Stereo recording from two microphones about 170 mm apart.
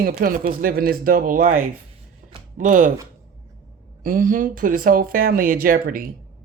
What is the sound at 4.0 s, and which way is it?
Speech, 55° right (ahead or behind).